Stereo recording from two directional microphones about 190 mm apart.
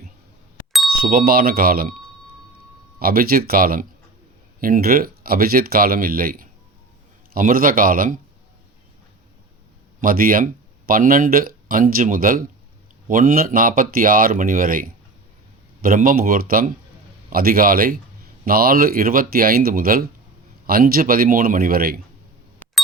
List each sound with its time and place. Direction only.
1.0 s speech: 50° right (ahead or behind)
3.0 s speech: 50° right (ahead or behind)
10.0 s speech: 50° right (ahead or behind)